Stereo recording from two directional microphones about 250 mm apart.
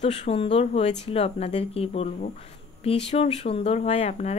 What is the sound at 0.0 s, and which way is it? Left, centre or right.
Speech, left.